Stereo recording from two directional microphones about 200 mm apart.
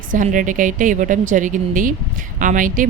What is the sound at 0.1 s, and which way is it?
A woman's voice, 40° right (ahead or behind).